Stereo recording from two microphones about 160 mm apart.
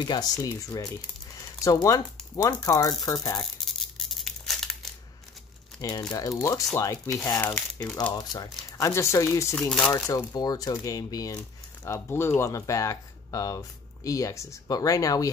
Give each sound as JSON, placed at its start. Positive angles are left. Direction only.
{"t": 0.0, "sound": "speech", "side_deg": 25}
{"t": 3.6, "sound": "tearing", "side_deg": 0}
{"t": 5.8, "sound": "speech", "side_deg": 20}
{"t": 8.1, "sound": "speech", "side_deg": 25}
{"t": 9.6, "sound": "speech", "side_deg": 5}
{"t": 9.9, "sound": "speech", "side_deg": 20}